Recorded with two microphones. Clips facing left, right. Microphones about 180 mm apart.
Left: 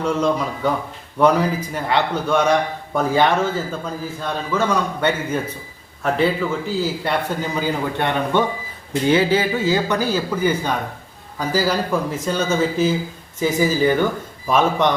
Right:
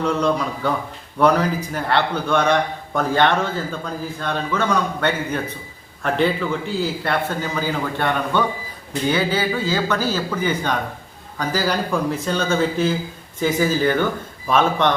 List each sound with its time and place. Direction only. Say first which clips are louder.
0.0 s a man's voice: even; 10° left (ahead or behind)
7.0 s a man's voice: left 1 dB; 15° left (ahead or behind)